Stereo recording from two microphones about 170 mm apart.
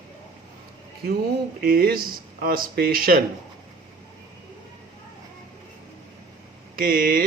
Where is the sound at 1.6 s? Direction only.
60° right (ahead or behind).